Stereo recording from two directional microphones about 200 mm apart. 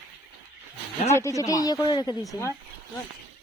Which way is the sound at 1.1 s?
15° left (ahead or behind).